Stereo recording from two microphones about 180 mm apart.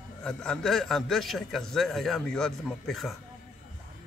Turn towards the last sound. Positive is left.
turn(degrees=0)  # may be behind; listen again after turning